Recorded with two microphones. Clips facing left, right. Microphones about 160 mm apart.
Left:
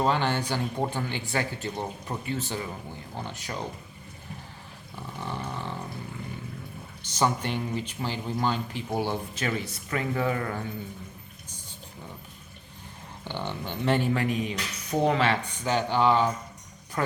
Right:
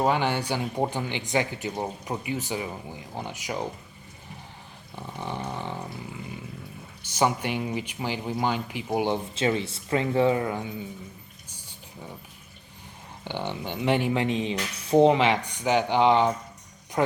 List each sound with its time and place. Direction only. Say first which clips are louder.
0.0 s speech: right 1 dB; 15° right (ahead or behind)
4.9 s roaring cats: right 2 dB; 20° right (ahead or behind)
7.1 s speech: right 2 dB; 10° right (ahead or behind)
13.2 s speech: right 2 dB; 15° right (ahead or behind)